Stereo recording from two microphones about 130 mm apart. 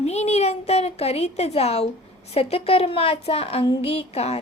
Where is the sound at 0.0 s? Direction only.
55° left (ahead or behind).